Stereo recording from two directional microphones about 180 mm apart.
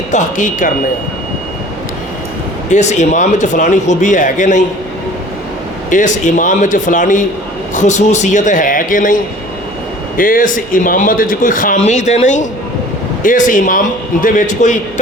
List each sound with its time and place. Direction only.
0.1 s speech: 45° left (ahead or behind)
2.6 s speech: 40° left (ahead or behind)
5.9 s speech: 45° left (ahead or behind)